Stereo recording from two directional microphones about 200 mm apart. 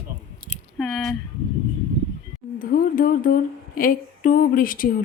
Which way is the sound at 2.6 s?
45° left (ahead or behind).